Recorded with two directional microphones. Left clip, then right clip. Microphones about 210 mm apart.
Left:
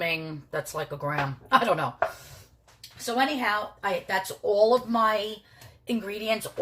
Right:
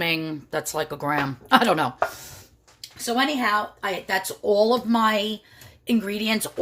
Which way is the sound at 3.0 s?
55° right (ahead or behind).